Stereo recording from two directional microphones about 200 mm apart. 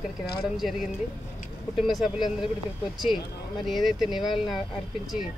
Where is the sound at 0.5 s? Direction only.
Centre (ahead or behind).